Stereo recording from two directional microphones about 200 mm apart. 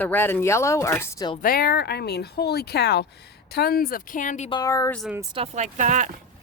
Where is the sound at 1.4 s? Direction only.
45° left (ahead or behind).